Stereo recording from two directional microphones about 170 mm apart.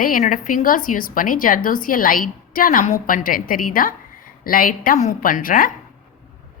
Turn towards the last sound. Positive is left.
turn(degrees=55)  # may be behind; listen again after turning